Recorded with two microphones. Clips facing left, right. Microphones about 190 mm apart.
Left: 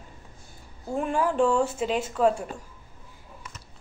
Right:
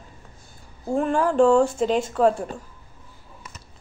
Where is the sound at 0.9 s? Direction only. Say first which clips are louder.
Right 5 dB; 5° left (ahead or behind).